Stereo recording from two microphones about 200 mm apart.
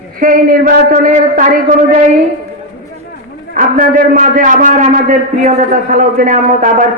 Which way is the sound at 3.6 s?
40° right (ahead or behind).